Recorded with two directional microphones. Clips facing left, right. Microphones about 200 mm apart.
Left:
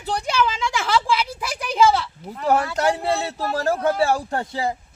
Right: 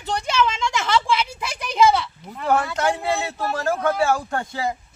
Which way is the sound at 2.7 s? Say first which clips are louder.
Left 1 dB; 35° left (ahead or behind).